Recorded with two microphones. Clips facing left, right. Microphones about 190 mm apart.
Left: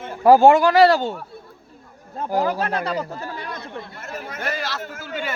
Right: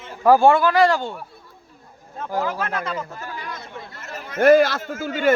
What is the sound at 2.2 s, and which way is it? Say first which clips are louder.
Speech: left 3 dB; 35° left (ahead or behind).